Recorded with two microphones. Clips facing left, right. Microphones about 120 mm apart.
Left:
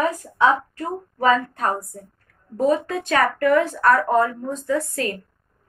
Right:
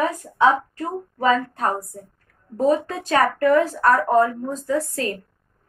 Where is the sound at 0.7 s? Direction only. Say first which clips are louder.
Even; 30° right (ahead or behind).